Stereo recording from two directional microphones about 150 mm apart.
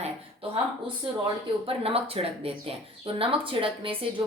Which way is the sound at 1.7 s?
40° right (ahead or behind).